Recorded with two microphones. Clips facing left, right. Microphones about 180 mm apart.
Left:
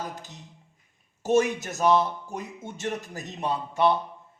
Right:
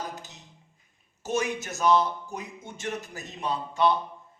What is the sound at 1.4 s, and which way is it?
Speech, 40° left (ahead or behind).